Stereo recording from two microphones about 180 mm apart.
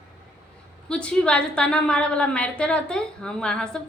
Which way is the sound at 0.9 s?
5° left (ahead or behind).